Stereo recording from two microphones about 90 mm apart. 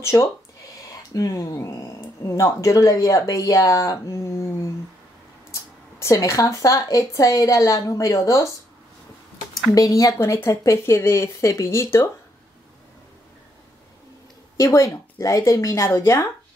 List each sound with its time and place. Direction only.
0.0 s speech: 30° left (ahead or behind)
1.1 s speech: 40° left (ahead or behind)
5.5 s speech: 35° left (ahead or behind)
9.8 s speech: 40° left (ahead or behind)
14.6 s speech: 35° left (ahead or behind)